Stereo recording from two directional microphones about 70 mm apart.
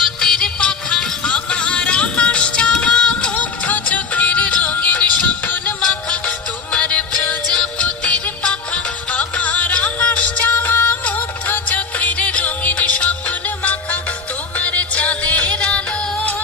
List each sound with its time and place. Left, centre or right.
0.2 s music: centre